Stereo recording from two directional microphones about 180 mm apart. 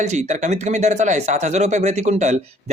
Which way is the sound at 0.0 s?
40° right (ahead or behind).